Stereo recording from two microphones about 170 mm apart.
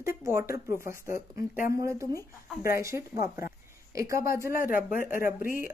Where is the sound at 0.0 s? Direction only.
15° right (ahead or behind).